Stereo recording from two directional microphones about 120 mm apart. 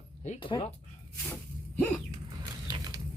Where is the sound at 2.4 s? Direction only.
40° right (ahead or behind).